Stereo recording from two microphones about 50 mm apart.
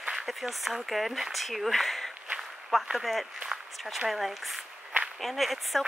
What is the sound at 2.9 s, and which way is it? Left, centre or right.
Speech, centre.